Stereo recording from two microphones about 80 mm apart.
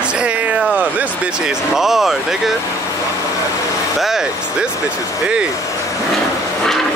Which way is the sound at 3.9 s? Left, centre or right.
Centre.